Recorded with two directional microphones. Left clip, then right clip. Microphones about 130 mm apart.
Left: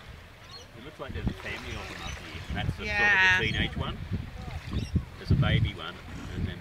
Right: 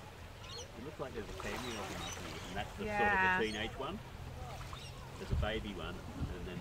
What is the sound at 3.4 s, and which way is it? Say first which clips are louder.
Speech: left 7 dB; 45° left (ahead or behind).